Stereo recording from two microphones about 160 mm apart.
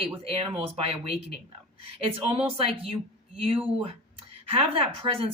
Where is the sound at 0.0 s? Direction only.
35° right (ahead or behind).